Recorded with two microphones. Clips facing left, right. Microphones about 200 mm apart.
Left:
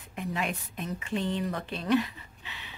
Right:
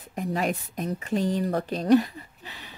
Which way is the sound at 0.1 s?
40° right (ahead or behind).